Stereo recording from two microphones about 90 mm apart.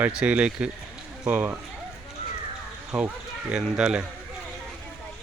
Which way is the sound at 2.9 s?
5° right (ahead or behind).